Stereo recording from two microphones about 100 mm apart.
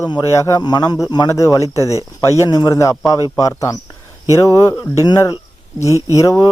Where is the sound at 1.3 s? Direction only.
30° left (ahead or behind).